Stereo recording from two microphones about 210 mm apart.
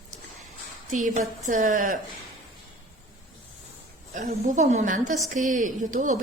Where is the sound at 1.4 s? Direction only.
40° right (ahead or behind).